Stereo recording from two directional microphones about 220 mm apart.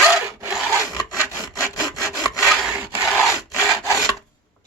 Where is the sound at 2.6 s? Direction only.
10° right (ahead or behind).